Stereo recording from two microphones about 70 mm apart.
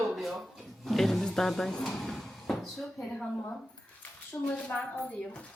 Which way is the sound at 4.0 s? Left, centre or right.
Centre.